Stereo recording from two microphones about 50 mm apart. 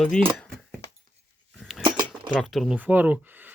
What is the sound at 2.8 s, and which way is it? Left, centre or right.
Speech, right.